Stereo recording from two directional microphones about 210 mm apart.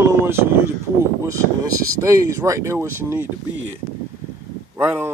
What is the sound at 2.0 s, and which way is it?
Speech, 15° right (ahead or behind).